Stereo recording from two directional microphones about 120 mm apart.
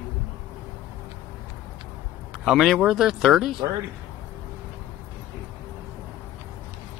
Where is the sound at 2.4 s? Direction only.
Centre (ahead or behind).